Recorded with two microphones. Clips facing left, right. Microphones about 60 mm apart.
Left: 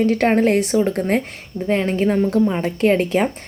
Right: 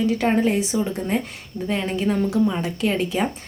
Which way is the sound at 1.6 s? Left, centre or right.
Left.